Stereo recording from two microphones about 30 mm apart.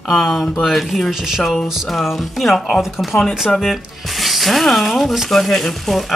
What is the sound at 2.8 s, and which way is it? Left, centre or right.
Speech, centre.